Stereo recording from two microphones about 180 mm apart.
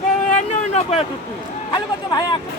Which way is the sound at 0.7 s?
35° left (ahead or behind).